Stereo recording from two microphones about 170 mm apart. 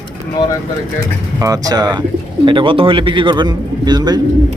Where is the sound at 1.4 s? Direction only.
20° right (ahead or behind).